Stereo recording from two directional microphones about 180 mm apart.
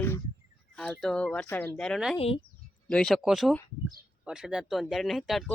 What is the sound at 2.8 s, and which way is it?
Speech, 5° left (ahead or behind).